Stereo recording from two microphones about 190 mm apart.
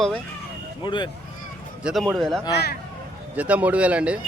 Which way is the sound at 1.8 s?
Centre (ahead or behind).